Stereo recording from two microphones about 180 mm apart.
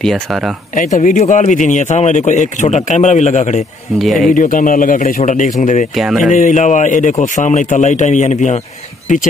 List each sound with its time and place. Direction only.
0.0 s speech: centre (ahead or behind)
0.7 s speech: 45° left (ahead or behind)
4.0 s speech: centre (ahead or behind)
4.3 s a man's voice: 45° left (ahead or behind)
5.9 s speech: centre (ahead or behind)
6.3 s a man's voice: 40° left (ahead or behind)